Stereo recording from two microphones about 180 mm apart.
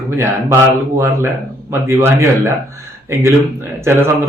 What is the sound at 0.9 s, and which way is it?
A man's voice, 15° right (ahead or behind).